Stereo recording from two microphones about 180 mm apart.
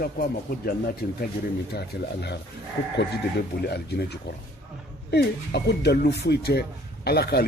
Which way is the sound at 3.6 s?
65° left (ahead or behind).